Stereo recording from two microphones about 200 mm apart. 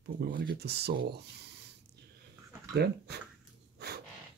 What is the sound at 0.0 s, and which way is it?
Speech, 55° right (ahead or behind).